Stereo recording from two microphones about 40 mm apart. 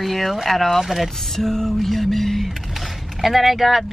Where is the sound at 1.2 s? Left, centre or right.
Centre.